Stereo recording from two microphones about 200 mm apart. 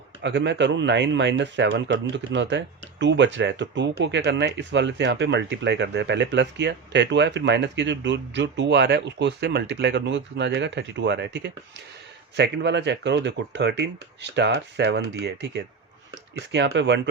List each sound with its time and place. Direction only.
0.2 s speech: 60° right (ahead or behind)